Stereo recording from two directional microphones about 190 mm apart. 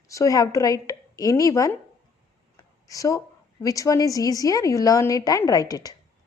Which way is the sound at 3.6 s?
15° left (ahead or behind).